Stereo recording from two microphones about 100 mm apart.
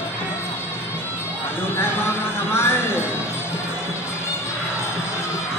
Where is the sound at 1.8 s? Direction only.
25° left (ahead or behind).